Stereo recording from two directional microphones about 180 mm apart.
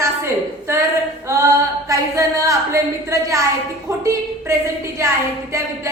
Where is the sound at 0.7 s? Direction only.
15° right (ahead or behind).